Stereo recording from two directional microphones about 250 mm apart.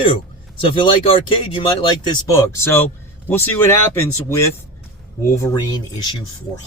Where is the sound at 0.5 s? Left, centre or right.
Centre.